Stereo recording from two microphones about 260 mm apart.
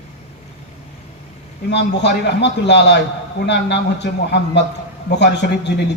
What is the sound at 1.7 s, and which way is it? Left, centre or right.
A man's voice, left.